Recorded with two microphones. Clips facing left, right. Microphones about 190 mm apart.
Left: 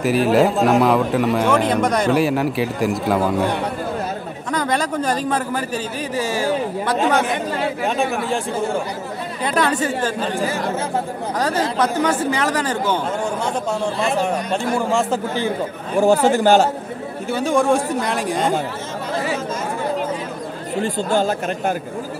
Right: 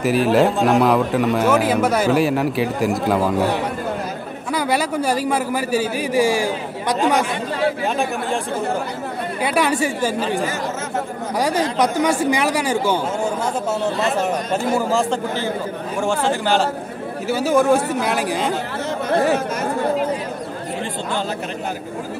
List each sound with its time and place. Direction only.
0.0 s a man's voice: centre (ahead or behind)
4.5 s a man's voice: 10° right (ahead or behind)
7.8 s a man's voice: centre (ahead or behind)
9.4 s a man's voice: 10° right (ahead or behind)
11.3 s a man's voice: 10° right (ahead or behind)
16.3 s a man's voice: 45° left (ahead or behind)
17.3 s a man's voice: 5° right (ahead or behind)
20.8 s a man's voice: 45° left (ahead or behind)